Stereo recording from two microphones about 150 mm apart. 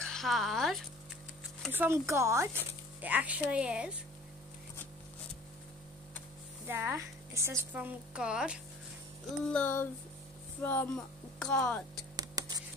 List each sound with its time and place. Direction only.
0.0 s speech: 5° left (ahead or behind)
1.7 s a woman's voice: 15° right (ahead or behind)
6.7 s a woman's voice: 15° right (ahead or behind)
9.5 s speech: 10° left (ahead or behind)
12.2 s a sound: 25° right (ahead or behind)